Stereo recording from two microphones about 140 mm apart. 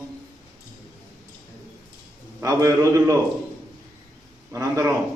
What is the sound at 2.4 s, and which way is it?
Speech, 20° right (ahead or behind).